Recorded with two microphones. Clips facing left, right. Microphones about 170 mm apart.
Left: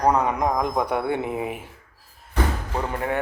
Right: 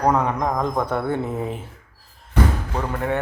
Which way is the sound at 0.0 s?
5° left (ahead or behind).